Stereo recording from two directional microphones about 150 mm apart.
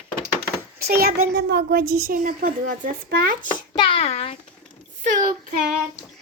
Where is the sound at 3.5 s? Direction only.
30° left (ahead or behind).